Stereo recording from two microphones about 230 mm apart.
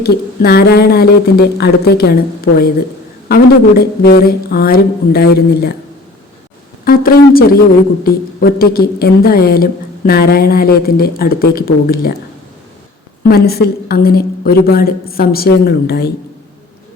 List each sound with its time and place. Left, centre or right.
0.0 s a woman's voice: left
6.8 s a woman's voice: left
13.2 s a woman's voice: left